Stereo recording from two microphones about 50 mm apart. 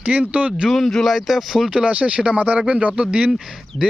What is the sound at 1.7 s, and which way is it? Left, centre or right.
Speech, right.